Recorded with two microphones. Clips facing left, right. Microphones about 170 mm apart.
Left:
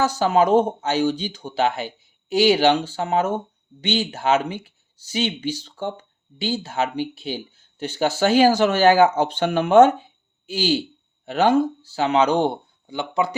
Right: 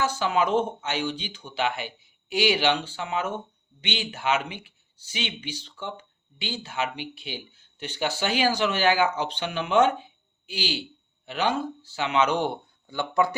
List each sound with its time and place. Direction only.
0.0 s speech: 40° left (ahead or behind)
12.9 s speech: 20° left (ahead or behind)